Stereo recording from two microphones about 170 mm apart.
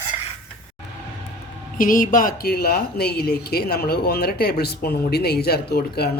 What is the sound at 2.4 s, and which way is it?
Speech, 65° left (ahead or behind).